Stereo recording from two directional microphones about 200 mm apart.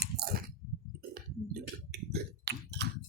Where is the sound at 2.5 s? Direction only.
60° right (ahead or behind).